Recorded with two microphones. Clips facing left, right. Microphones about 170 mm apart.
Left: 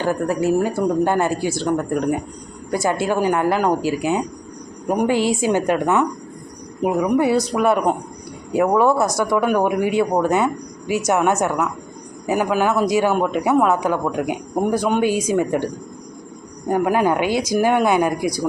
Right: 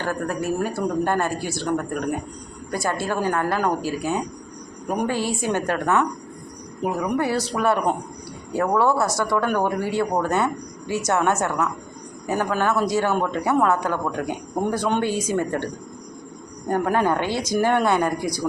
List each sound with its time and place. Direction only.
0.0 s speech: 15° left (ahead or behind)